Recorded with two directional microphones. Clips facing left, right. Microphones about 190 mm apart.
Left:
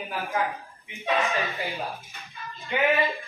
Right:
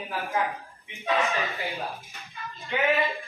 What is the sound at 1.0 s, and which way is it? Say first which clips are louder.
Speech: even; centre (ahead or behind).